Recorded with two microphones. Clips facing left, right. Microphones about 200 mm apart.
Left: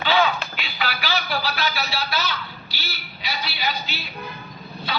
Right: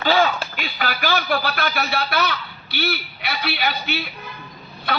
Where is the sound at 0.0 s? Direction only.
45° right (ahead or behind).